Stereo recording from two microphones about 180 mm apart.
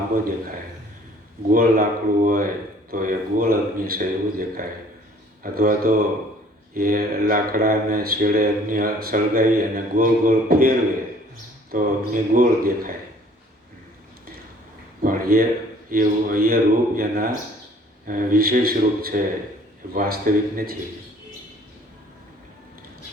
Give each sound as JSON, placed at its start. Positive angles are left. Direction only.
{"t": 1.5, "sound": "speech", "side_deg": -50}
{"t": 15.0, "sound": "speech", "side_deg": -55}